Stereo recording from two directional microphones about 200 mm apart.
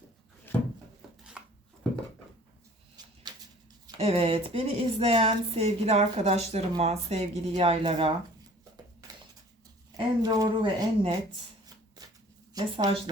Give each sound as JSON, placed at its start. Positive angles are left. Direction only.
{"t": 0.5, "sound": "wood", "side_deg": 10}
{"t": 1.0, "sound": "chopping", "side_deg": 0}
{"t": 2.9, "sound": "a sound", "side_deg": -20}
{"t": 3.8, "sound": "speech", "side_deg": -25}
{"t": 10.2, "sound": "speech", "side_deg": -20}
{"t": 12.5, "sound": "speech", "side_deg": -25}